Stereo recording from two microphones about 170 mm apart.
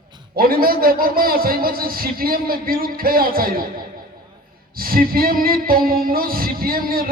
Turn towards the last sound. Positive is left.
turn(degrees=-60)  # may be behind; listen again after turning